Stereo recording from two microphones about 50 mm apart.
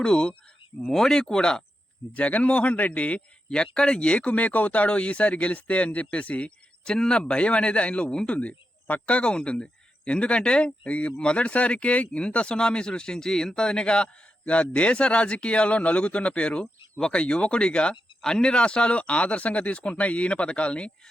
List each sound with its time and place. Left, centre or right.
0.0 s speech: centre
2.1 s speech: left
6.8 s speech: centre